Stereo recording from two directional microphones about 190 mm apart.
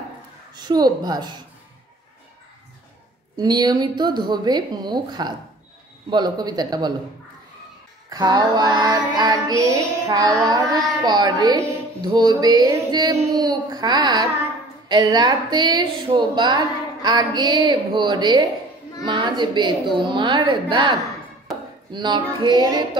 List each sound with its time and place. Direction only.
0.6 s a woman's voice: 20° right (ahead or behind)
3.3 s a woman's voice: 20° right (ahead or behind)
8.1 s a woman's voice: 20° right (ahead or behind)
9.8 s music: 15° right (ahead or behind)
11.1 s a woman's voice: 20° right (ahead or behind)